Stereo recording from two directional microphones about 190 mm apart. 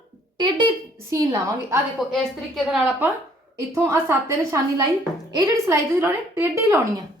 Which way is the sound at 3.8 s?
15° right (ahead or behind).